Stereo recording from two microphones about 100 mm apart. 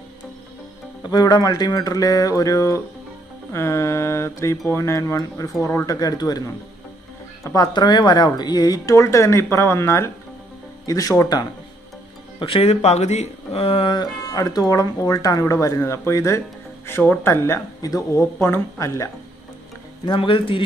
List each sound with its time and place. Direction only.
1.0 s speech: 45° left (ahead or behind)
7.4 s speech: 35° left (ahead or behind)
10.9 s speech: 40° left (ahead or behind)
12.4 s speech: 70° left (ahead or behind)
13.9 s speech: 40° left (ahead or behind)
20.1 s a man's voice: 60° left (ahead or behind)